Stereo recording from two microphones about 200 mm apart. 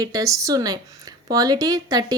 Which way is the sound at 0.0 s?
15° right (ahead or behind).